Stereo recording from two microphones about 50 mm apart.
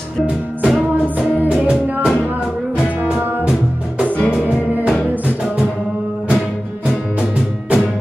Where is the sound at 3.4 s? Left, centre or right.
Centre.